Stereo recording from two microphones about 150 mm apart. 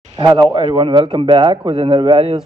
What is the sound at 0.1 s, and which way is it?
A man's voice, 30° right (ahead or behind).